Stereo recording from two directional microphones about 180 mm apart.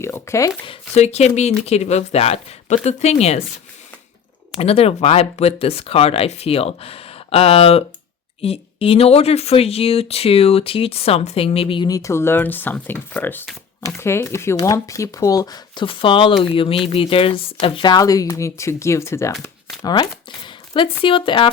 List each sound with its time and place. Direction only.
0.0 s speech: 15° left (ahead or behind)
0.6 s speech: 35° left (ahead or behind)
4.5 s speech: 35° left (ahead or behind)